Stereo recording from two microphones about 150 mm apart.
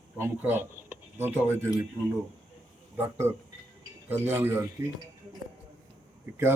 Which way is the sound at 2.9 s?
15° right (ahead or behind).